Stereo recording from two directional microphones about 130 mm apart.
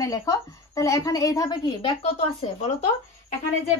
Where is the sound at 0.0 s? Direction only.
25° left (ahead or behind); by 2.2 s 45° left (ahead or behind).